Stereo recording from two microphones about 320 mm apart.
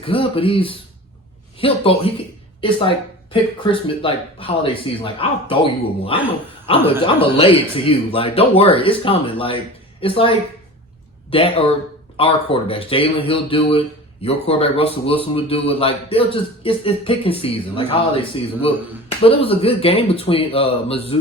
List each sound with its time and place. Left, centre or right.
0.0 s speech: centre
6.7 s speech: centre